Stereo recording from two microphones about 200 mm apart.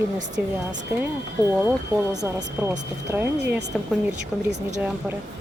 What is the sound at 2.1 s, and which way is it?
Speech, 20° right (ahead or behind).